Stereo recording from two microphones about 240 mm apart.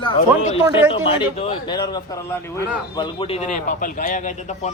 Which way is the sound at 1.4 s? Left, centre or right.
Left.